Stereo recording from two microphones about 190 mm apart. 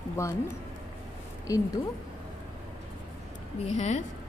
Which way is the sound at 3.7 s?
35° left (ahead or behind).